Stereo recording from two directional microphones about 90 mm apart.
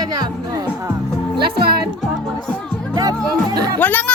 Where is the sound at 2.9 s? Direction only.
45° right (ahead or behind).